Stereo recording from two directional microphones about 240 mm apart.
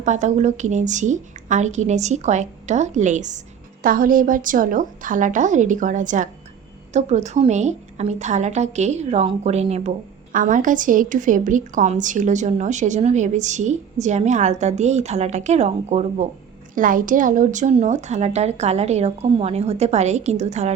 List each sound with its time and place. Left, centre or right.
0.0 s a woman's voice: right